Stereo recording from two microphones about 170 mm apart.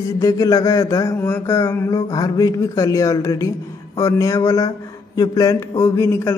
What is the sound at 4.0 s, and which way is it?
Speech, 20° left (ahead or behind).